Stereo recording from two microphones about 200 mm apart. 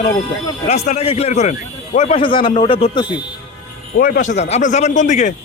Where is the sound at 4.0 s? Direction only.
45° left (ahead or behind).